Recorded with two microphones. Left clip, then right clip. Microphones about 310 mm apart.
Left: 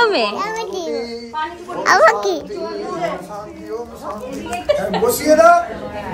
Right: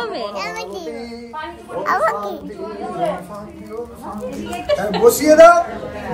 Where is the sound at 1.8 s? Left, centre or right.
Left.